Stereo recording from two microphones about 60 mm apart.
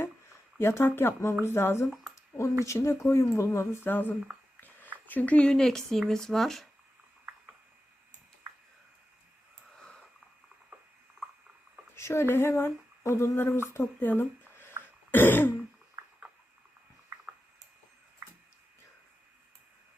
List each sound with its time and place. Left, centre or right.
0.6 s speech: left
0.9 s throat clearing: left
1.5 s speech: left
2.6 s speech: left
5.5 s speech: centre
11.9 s a sound: left
12.3 s speech: left
14.1 s a sound: left
15.1 s throat clearing: left
16.0 s a sound: right